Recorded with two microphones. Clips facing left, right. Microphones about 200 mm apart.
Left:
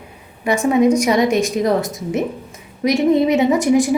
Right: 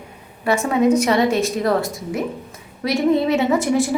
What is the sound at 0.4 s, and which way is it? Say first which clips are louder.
A woman's voice: left 3 dB; 15° left (ahead or behind).